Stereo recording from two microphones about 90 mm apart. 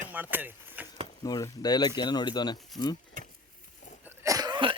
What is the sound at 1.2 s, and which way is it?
Speech, 45° left (ahead or behind).